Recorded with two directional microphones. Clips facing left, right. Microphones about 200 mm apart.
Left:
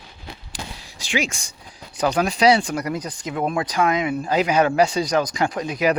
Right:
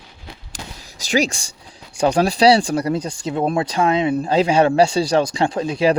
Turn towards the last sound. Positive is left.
turn(degrees=-30)  # may be behind; listen again after turning